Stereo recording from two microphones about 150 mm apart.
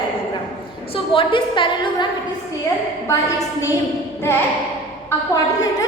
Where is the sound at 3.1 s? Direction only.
20° left (ahead or behind).